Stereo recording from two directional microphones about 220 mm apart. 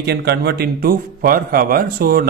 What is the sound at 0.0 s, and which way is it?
A man's voice, 50° right (ahead or behind).